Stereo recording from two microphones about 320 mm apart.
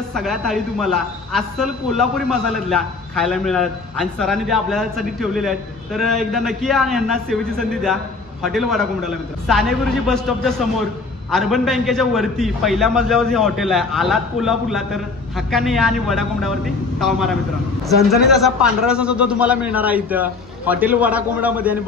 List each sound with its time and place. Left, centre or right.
0.1 s a man's voice: centre